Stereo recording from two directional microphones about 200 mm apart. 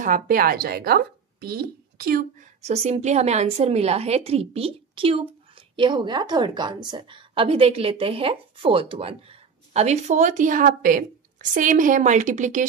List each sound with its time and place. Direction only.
0.0 s a woman's voice: 45° right (ahead or behind)